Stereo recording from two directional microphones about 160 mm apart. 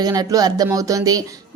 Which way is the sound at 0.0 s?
25° right (ahead or behind).